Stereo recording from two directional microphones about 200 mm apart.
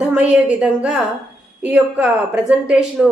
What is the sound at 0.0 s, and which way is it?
A woman's voice, 5° right (ahead or behind).